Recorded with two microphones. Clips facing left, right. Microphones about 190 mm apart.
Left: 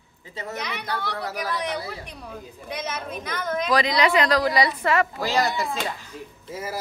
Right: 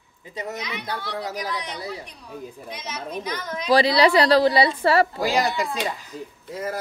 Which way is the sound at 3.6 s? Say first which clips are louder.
Right 5 dB; 30° right (ahead or behind).